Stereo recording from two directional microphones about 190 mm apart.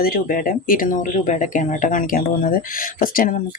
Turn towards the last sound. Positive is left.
turn(degrees=45)  # may be behind; listen again after turning